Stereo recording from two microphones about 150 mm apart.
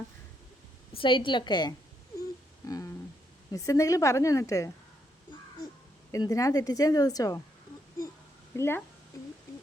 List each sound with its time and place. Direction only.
0.9 s a woman's voice: 35° left (ahead or behind)
2.6 s a sound: 25° left (ahead or behind)
3.5 s speech: 20° left (ahead or behind)
6.1 s speech: 20° left (ahead or behind)
8.5 s speech: 15° left (ahead or behind)